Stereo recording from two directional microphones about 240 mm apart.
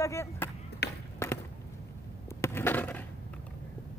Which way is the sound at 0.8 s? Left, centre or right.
Left.